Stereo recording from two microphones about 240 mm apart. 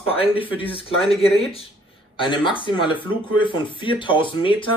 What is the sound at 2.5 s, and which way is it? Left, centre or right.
Speech, left.